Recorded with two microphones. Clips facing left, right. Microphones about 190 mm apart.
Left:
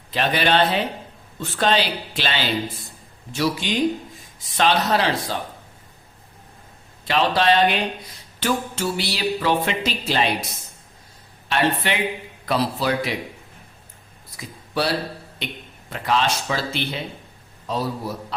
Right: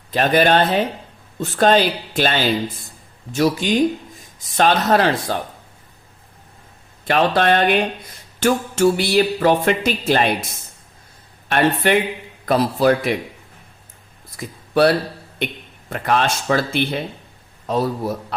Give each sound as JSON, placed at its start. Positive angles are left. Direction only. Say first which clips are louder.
{"t": 0.1, "sound": "speech", "louder": "right 5 dB", "side_deg": -45}
{"t": 7.0, "sound": "speech", "louder": "right 3 dB", "side_deg": -55}
{"t": 11.4, "sound": "speech", "louder": "right 5 dB", "side_deg": -50}
{"t": 14.3, "sound": "a man's voice", "louder": "right 8 dB", "side_deg": -55}